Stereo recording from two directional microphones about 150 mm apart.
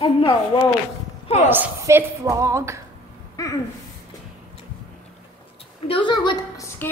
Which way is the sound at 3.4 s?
20° left (ahead or behind).